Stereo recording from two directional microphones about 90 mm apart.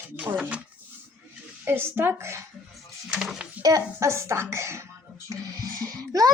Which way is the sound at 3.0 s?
5° right (ahead or behind).